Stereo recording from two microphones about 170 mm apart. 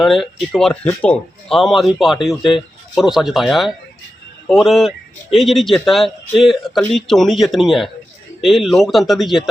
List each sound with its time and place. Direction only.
0.0 s speech: centre (ahead or behind)